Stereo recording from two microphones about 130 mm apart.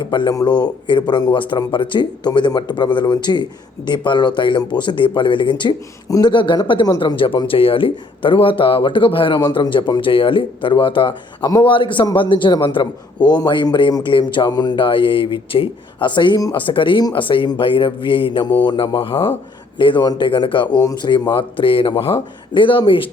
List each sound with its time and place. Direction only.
0.0 s a man's voice: 35° left (ahead or behind)
6.1 s speech: 25° left (ahead or behind)
6.3 s a man's voice: 40° left (ahead or behind)